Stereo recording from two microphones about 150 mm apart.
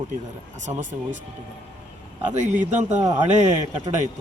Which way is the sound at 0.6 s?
55° right (ahead or behind).